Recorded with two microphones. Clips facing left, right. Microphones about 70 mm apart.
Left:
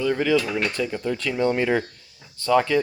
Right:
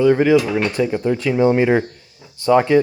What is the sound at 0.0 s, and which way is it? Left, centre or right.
Speech, right.